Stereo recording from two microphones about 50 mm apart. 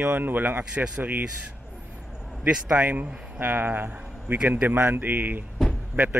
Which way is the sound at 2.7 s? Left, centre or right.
Right.